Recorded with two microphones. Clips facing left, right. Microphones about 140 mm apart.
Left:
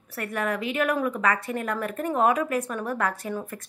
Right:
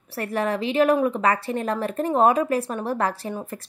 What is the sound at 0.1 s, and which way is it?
A woman's voice, 30° right (ahead or behind).